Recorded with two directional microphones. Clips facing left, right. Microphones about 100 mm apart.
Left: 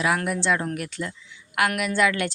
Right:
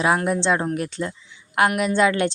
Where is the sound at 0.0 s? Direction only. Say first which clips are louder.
Right 4 dB; 30° right (ahead or behind).